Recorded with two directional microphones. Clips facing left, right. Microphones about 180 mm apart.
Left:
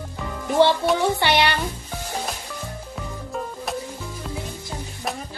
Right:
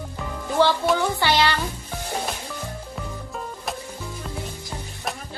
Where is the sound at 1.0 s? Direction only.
20° left (ahead or behind).